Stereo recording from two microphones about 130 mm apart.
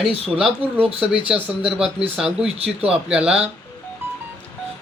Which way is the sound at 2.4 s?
50° right (ahead or behind).